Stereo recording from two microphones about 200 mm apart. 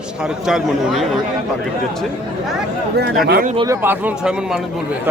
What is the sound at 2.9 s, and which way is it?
Speech, 55° right (ahead or behind).